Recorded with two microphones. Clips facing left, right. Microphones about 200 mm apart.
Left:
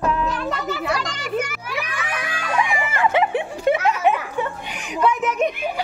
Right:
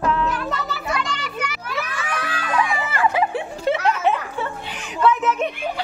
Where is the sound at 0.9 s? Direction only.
45° left (ahead or behind).